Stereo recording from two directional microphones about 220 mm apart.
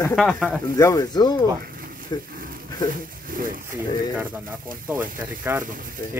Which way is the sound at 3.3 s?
40° right (ahead or behind).